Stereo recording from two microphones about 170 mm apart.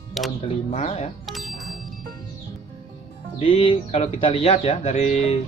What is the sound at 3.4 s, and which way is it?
Speech, 35° left (ahead or behind).